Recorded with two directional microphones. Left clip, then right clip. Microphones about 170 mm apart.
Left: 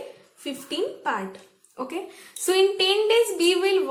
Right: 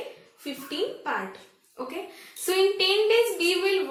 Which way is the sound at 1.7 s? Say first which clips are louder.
Left 3 dB; 35° left (ahead or behind).